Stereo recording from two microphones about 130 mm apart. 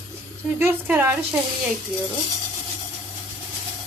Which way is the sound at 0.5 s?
15° right (ahead or behind).